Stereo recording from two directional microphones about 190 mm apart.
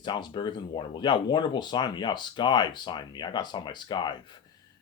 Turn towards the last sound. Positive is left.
turn(degrees=25)  # may be behind; listen again after turning